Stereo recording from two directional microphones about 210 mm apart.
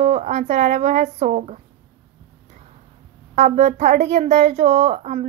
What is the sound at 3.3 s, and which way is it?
A woman's voice, 30° right (ahead or behind).